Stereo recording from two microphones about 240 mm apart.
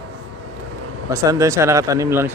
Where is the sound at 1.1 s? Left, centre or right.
Centre.